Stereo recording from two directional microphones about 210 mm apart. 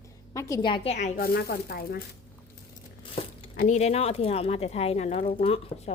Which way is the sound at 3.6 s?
30° left (ahead or behind).